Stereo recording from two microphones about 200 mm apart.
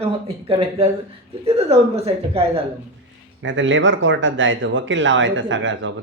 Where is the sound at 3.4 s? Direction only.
70° right (ahead or behind).